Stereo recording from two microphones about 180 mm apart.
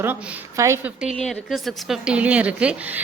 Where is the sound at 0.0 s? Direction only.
15° right (ahead or behind).